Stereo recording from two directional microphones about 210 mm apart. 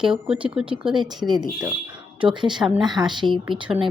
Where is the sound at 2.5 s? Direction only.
Centre (ahead or behind).